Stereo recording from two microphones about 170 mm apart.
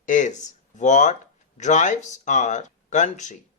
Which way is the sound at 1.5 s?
45° left (ahead or behind).